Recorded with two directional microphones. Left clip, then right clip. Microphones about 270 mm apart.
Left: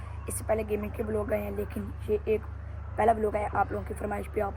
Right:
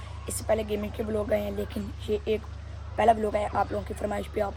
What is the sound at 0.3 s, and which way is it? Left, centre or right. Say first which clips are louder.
Speech: right 2 dB; right.